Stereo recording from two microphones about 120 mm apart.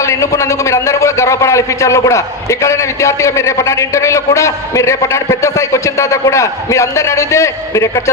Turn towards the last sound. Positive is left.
turn(degrees=25)  # may be behind; listen again after turning